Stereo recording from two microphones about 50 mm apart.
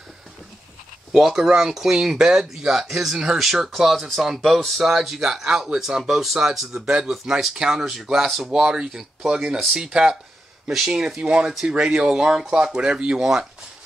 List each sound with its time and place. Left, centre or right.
1.1 s speech: centre
11.1 s speech: right
11.4 s speech: centre